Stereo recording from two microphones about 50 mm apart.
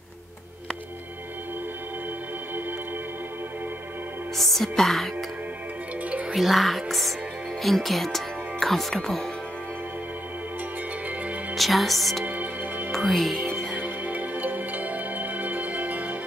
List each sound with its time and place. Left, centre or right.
4.4 s music: centre
6.3 s speech: centre
11.5 s music: centre
12.3 s music: right
12.9 s music: centre
13.7 s music: right